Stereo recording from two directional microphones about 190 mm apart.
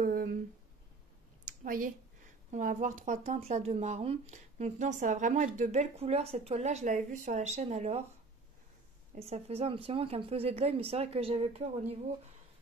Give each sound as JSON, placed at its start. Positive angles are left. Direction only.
{"t": 0.0, "sound": "a sound", "side_deg": -50}
{"t": 1.6, "sound": "a woman's voice", "side_deg": -45}
{"t": 9.1, "sound": "a woman's voice", "side_deg": -35}